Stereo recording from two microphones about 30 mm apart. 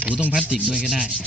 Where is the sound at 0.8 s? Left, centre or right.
Centre.